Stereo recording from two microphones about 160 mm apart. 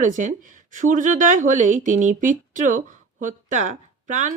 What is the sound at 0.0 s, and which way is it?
Speech, 50° right (ahead or behind).